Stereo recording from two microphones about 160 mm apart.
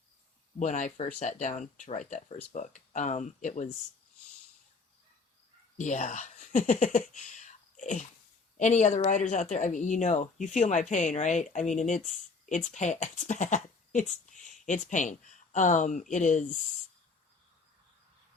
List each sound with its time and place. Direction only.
0.6 s speech: 50° left (ahead or behind)
5.7 s speech: 50° left (ahead or behind)